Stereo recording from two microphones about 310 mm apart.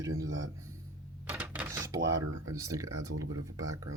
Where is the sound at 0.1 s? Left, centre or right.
Right.